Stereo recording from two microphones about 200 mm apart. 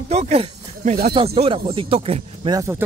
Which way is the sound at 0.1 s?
30° right (ahead or behind).